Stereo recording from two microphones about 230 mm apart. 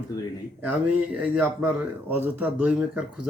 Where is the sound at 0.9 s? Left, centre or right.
Centre.